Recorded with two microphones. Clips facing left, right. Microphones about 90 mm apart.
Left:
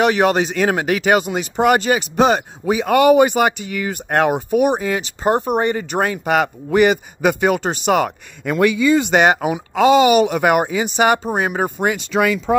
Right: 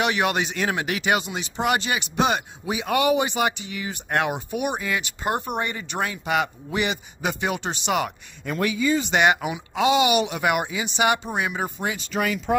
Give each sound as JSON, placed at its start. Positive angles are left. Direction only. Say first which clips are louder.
{"t": 0.0, "sound": "speech", "louder": "left 8 dB", "side_deg": 40}
{"t": 8.5, "sound": "speech", "louder": "left 8 dB", "side_deg": 85}
{"t": 9.1, "sound": "speech", "louder": "left 6 dB", "side_deg": 40}